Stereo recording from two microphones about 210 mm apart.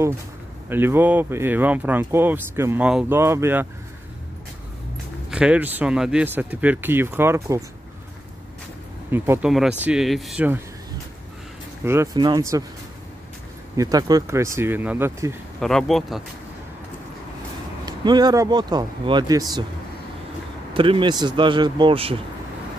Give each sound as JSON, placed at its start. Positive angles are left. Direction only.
{"t": 0.7, "sound": "speech", "side_deg": -10}
{"t": 5.3, "sound": "speech", "side_deg": -5}
{"t": 9.1, "sound": "speech", "side_deg": -10}
{"t": 11.8, "sound": "speech", "side_deg": -10}
{"t": 13.7, "sound": "speech", "side_deg": -20}
{"t": 15.6, "sound": "speech", "side_deg": 0}
{"t": 17.8, "sound": "speech", "side_deg": -20}
{"t": 20.7, "sound": "speech", "side_deg": -25}